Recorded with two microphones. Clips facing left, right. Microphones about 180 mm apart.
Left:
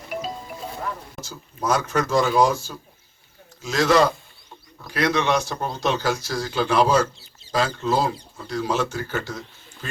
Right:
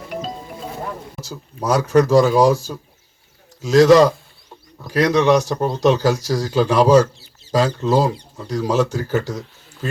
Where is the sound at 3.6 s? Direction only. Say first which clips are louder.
Right 8 dB; 35° right (ahead or behind).